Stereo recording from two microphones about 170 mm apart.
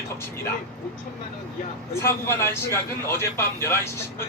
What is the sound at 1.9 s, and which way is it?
Speech, 15° left (ahead or behind).